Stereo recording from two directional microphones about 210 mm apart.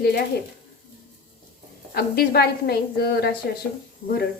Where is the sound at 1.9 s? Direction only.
50° left (ahead or behind).